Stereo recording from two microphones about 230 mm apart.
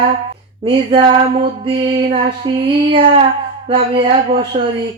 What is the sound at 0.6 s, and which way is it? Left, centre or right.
Music, right.